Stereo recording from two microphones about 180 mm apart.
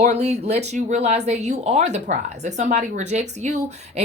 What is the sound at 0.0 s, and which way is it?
Speech, 40° right (ahead or behind).